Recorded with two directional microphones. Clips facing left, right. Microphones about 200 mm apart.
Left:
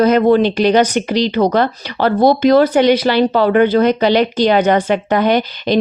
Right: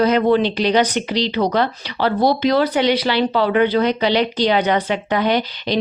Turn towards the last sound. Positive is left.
turn(degrees=50)  # may be behind; listen again after turning